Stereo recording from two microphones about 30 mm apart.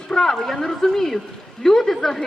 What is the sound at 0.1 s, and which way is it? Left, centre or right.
A woman's voice, centre.